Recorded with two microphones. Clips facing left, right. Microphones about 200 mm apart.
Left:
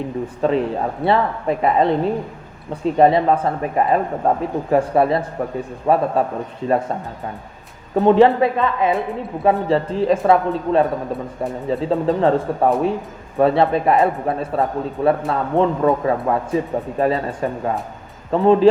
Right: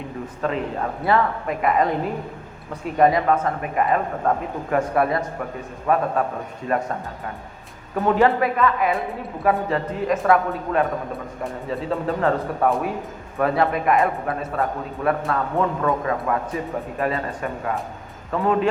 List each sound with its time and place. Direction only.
0.4 s a man's voice: 30° left (ahead or behind)
7.9 s a man's voice: 25° left (ahead or behind)